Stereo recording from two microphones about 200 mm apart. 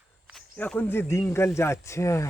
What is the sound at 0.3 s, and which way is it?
Speech, 5° left (ahead or behind).